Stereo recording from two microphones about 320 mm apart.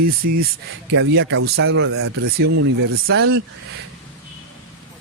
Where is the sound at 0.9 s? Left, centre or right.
Right.